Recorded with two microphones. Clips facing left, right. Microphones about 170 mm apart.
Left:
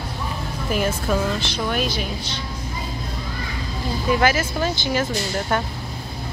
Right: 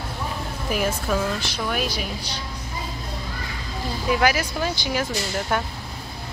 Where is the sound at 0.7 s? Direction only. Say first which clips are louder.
Left 2 dB; 5° right (ahead or behind).